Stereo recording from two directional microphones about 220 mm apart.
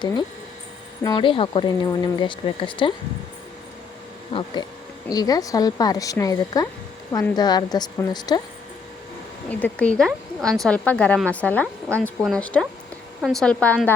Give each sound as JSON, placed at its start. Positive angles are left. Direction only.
{"t": 0.0, "sound": "speech", "side_deg": 20}
{"t": 4.3, "sound": "a woman's voice", "side_deg": 25}
{"t": 9.5, "sound": "speech", "side_deg": 5}